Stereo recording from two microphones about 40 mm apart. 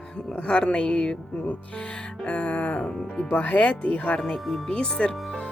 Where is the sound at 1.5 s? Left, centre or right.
Left.